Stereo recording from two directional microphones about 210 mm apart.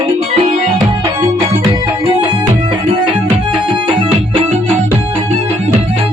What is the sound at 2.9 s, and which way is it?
Music, 25° right (ahead or behind).